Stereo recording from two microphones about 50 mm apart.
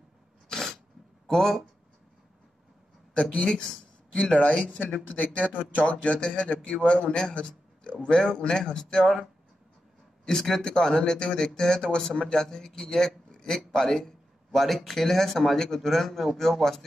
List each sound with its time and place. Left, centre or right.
0.5 s a sound: centre
3.2 s speech: left
5.5 s speech: right
5.9 s a man's voice: left
10.2 s a man's voice: centre